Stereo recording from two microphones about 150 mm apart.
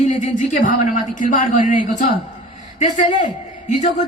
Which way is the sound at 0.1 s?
55° left (ahead or behind).